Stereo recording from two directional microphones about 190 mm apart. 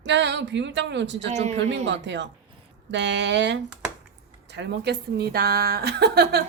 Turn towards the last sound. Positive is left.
turn(degrees=-60)  # may be behind; listen again after turning